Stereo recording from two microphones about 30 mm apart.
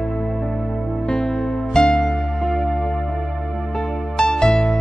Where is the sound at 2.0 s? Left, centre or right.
Centre.